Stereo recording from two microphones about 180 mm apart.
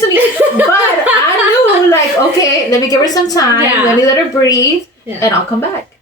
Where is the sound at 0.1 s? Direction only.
10° right (ahead or behind).